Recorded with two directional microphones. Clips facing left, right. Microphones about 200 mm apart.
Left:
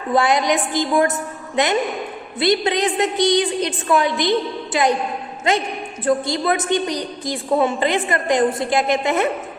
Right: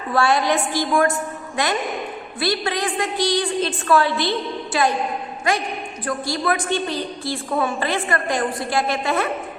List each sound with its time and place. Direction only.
0.1 s a woman's voice: 20° left (ahead or behind)